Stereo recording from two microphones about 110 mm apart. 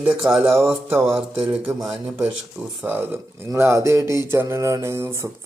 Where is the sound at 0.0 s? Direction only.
10° right (ahead or behind).